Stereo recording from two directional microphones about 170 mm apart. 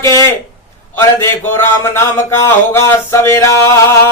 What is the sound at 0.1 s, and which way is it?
Speech, 20° left (ahead or behind).